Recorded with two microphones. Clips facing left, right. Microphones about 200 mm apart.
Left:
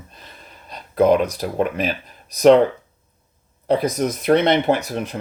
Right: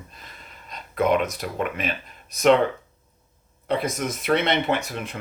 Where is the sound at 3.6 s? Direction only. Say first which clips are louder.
Left 6 dB; 35° left (ahead or behind).